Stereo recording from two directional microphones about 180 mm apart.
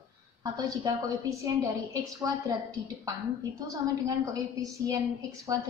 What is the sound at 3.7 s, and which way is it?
A woman's voice, 20° right (ahead or behind).